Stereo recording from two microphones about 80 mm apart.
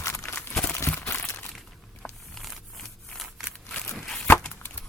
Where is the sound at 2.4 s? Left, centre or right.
Centre.